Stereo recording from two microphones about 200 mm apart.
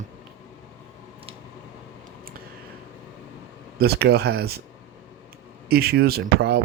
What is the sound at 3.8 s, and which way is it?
Speech, 50° right (ahead or behind).